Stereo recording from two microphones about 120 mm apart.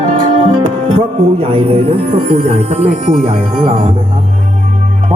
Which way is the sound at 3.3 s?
50° right (ahead or behind).